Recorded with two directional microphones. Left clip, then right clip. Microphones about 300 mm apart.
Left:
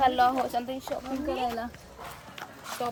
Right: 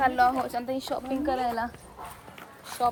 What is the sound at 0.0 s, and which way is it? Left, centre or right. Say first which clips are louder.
Speech: even; centre.